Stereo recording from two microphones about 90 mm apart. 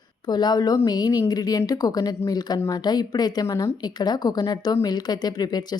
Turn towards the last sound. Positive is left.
turn(degrees=50)  # may be behind; listen again after turning